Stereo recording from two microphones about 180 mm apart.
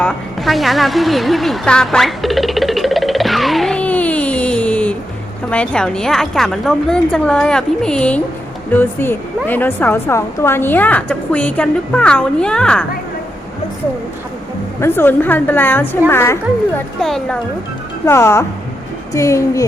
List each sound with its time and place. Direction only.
0.0 s a sound: centre (ahead or behind)
5.5 s a woman's voice: 5° left (ahead or behind)
14.8 s a woman's voice: 10° left (ahead or behind)
17.0 s a woman's voice: centre (ahead or behind)
18.0 s a woman's voice: 15° left (ahead or behind)